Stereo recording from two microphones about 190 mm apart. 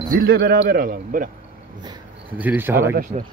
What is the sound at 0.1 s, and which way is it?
A man's voice, 55° right (ahead or behind).